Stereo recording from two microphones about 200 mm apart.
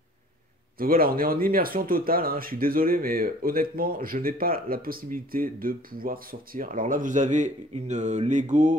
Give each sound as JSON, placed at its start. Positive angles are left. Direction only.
{"t": 0.7, "sound": "speech", "side_deg": -45}